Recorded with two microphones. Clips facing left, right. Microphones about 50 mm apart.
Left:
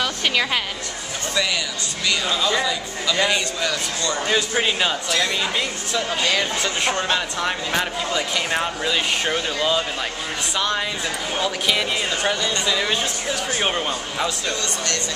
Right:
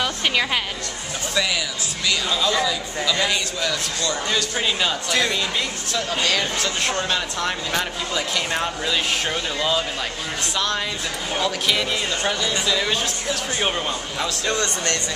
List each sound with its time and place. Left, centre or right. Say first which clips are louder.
0.0 s a woman's voice: even; centre
2.0 s speech: even; centre
4.3 s speech: left 4 dB; centre
14.5 s speech: right 2 dB; right